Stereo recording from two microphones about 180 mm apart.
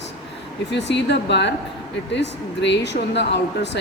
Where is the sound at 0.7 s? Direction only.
75° left (ahead or behind).